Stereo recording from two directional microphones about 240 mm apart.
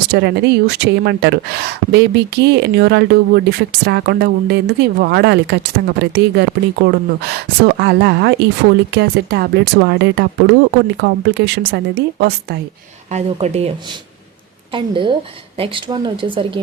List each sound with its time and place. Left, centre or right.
0.1 s speech: right
13.1 s a woman's voice: right